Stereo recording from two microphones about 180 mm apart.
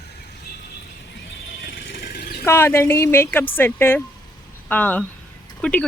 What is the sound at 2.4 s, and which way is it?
Speech, 15° left (ahead or behind).